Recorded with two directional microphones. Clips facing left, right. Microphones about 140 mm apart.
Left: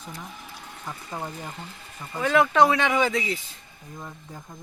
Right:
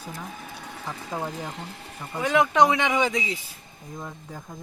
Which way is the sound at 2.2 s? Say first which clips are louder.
Even; 15° right (ahead or behind).